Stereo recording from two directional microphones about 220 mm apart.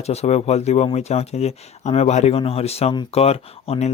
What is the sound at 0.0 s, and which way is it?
Speech, 30° left (ahead or behind).